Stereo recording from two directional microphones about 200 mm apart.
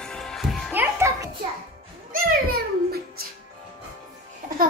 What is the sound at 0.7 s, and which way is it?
Music, 15° right (ahead or behind).